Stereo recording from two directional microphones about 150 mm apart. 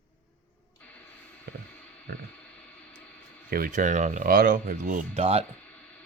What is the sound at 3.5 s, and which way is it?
Speech, 70° right (ahead or behind).